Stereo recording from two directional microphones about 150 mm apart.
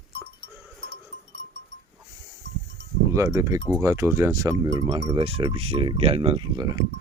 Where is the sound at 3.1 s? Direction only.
20° right (ahead or behind).